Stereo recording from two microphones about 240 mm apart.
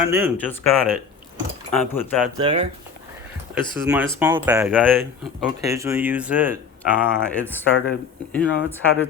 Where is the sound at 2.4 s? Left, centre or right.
Right.